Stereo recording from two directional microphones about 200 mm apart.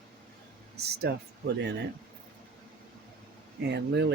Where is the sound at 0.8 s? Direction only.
55° right (ahead or behind).